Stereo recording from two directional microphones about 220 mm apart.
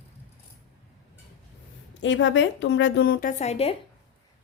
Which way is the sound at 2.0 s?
55° left (ahead or behind).